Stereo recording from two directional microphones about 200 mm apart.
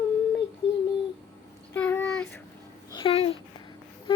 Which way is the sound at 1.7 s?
10° left (ahead or behind).